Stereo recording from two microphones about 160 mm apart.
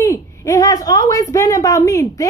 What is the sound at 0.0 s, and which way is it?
A woman's voice, 20° left (ahead or behind).